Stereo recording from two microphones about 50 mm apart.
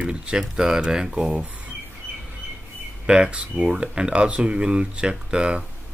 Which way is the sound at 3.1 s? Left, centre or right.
Centre.